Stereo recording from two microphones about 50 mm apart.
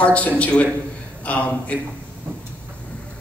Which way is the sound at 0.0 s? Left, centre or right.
Left.